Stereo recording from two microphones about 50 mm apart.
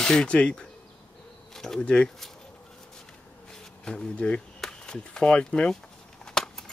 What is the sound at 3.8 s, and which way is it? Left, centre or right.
Speech, centre.